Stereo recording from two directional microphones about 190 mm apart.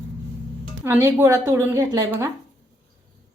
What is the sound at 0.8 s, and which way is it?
A woman's voice, 15° right (ahead or behind).